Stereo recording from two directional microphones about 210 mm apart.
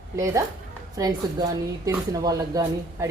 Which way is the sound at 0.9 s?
15° right (ahead or behind).